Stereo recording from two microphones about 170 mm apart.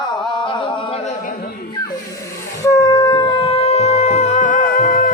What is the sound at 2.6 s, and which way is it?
Music, 20° left (ahead or behind).